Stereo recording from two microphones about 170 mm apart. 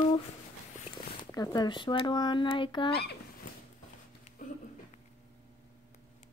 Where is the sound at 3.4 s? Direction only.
50° left (ahead or behind).